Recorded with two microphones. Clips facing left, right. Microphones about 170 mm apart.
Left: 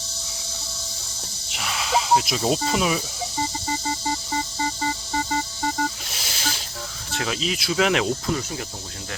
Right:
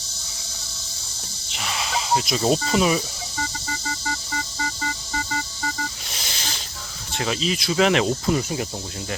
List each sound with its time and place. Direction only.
1.5 s speech: centre (ahead or behind)
4.5 s music: 30° left (ahead or behind)
6.1 s snake: 5° left (ahead or behind)
7.2 s speech: centre (ahead or behind)
8.3 s speech: 10° right (ahead or behind)